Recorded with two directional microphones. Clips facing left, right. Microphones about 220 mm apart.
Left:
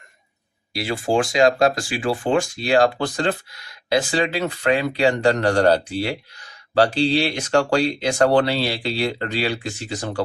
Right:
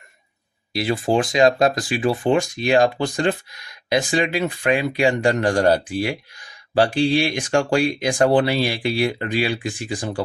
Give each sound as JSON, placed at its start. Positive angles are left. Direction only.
{"t": 0.7, "sound": "speech", "side_deg": -20}